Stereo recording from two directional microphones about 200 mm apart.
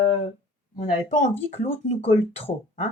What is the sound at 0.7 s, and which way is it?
Speech, 40° left (ahead or behind).